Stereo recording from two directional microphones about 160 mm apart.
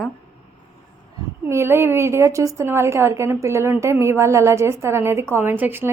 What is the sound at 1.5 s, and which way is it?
A woman's voice, 15° right (ahead or behind).